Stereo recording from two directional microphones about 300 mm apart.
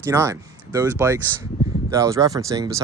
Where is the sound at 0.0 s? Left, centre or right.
Centre.